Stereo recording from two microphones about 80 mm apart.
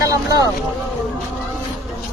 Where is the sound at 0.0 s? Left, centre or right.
Right.